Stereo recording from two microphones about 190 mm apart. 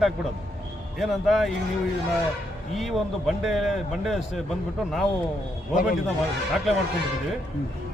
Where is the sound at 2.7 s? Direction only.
Centre (ahead or behind).